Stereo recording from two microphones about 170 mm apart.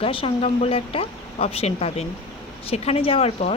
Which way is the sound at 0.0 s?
30° left (ahead or behind).